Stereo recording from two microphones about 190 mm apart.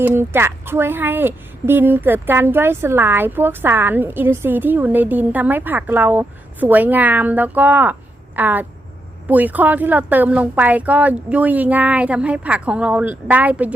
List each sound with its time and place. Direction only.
0.0 s a woman's voice: 10° right (ahead or behind)